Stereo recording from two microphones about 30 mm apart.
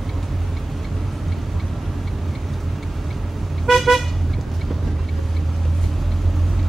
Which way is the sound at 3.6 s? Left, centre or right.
Centre.